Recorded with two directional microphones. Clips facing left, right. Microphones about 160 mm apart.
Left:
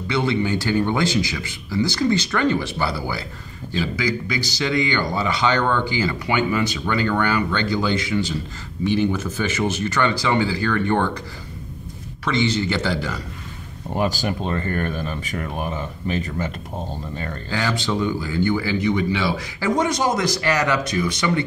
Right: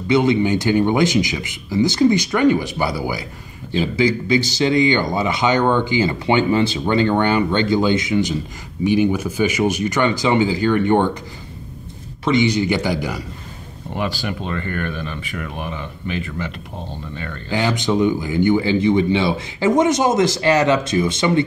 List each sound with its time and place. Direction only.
0.1 s a man's voice: 20° right (ahead or behind)
12.3 s a man's voice: 15° right (ahead or behind)
13.9 s speech: 40° left (ahead or behind)
17.5 s speech: 20° right (ahead or behind)